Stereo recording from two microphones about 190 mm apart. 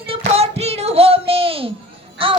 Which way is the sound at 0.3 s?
35° right (ahead or behind).